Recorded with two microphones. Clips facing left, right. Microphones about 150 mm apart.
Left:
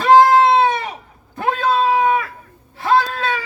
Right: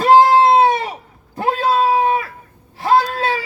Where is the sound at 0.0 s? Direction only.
30° right (ahead or behind).